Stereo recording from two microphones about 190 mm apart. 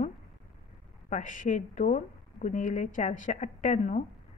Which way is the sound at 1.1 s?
40° left (ahead or behind).